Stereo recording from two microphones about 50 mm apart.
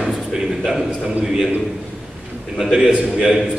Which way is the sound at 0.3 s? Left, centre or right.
Centre.